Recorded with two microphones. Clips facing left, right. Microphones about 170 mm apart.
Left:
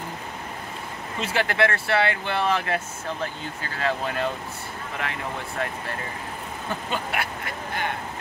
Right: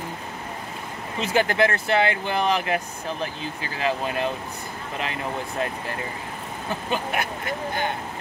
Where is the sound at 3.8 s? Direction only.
20° right (ahead or behind).